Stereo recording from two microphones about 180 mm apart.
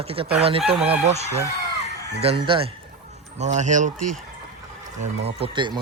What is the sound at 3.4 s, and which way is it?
Speech, 40° right (ahead or behind).